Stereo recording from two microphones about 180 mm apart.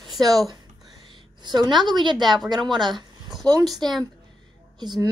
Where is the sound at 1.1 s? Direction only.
25° right (ahead or behind).